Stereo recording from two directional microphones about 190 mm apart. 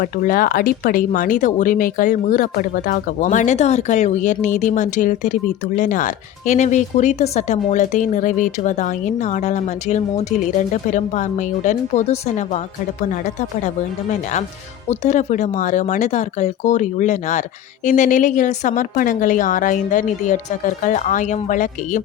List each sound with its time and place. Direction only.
0.0 s speech: 45° left (ahead or behind)
14.8 s speech: 40° left (ahead or behind)